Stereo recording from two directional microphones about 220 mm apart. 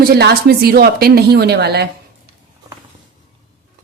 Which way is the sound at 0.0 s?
45° right (ahead or behind).